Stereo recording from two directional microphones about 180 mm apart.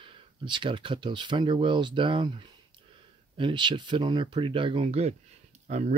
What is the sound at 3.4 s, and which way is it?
Speech, 25° right (ahead or behind).